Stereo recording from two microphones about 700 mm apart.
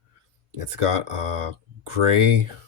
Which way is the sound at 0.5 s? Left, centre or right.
Right.